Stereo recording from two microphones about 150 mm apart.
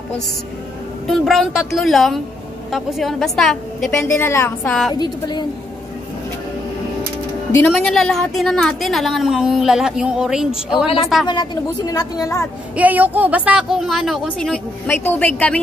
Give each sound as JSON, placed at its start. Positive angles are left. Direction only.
{"t": 1.0, "sound": "a woman's voice", "side_deg": 0}
{"t": 3.9, "sound": "a woman's voice", "side_deg": 15}
{"t": 4.6, "sound": "a woman's voice", "side_deg": 5}
{"t": 4.9, "sound": "speech", "side_deg": 30}
{"t": 7.7, "sound": "a woman's voice", "side_deg": 0}
{"t": 11.2, "sound": "speech", "side_deg": 25}
{"t": 12.7, "sound": "a woman's voice", "side_deg": -10}